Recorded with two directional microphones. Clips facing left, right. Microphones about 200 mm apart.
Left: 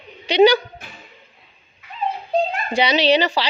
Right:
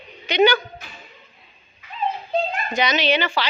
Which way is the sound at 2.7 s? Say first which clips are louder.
Left 5 dB; 30° left (ahead or behind).